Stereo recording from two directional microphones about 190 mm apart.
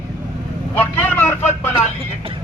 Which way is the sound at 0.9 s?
10° left (ahead or behind).